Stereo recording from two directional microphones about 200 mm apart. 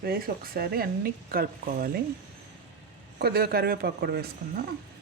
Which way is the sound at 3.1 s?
50° right (ahead or behind).